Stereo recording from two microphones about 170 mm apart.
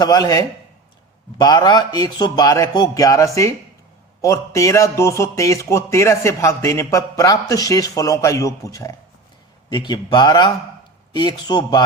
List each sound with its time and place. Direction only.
0.0 s a man's voice: 25° left (ahead or behind)